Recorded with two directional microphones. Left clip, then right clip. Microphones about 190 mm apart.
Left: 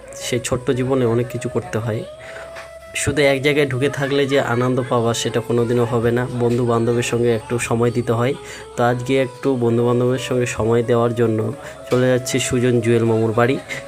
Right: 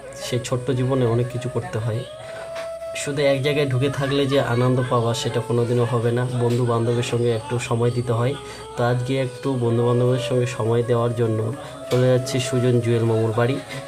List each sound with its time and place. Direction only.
0.3 s speech: 25° left (ahead or behind)